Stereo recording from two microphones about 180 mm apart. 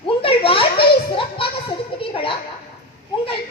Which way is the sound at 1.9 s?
30° left (ahead or behind).